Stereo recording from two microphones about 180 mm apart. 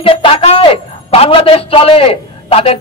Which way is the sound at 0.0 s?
30° left (ahead or behind).